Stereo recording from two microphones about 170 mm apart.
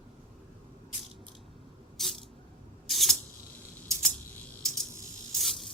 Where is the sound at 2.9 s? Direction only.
Centre (ahead or behind).